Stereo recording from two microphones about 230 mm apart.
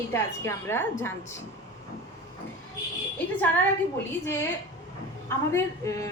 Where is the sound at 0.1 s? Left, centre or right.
Centre.